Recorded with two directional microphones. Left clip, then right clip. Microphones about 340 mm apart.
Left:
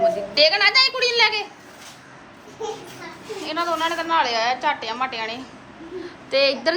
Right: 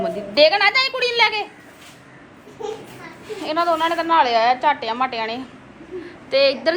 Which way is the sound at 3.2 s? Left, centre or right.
Centre.